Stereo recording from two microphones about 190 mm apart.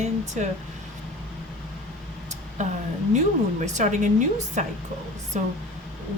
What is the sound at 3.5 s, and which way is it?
Speech, 40° right (ahead or behind).